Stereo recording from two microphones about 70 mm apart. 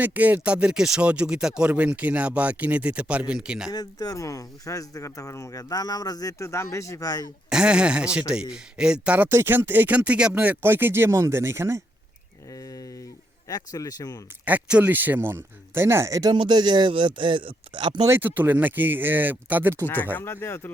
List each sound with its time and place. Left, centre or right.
0.0 s speech: right
3.7 s speech: left
6.4 s speech: left
7.5 s speech: centre
9.3 s speech: right
12.5 s a sound: left
13.5 s speech: left
14.4 s speech: right
16.2 s speech: right
18.1 s speech: right
19.8 s speech: left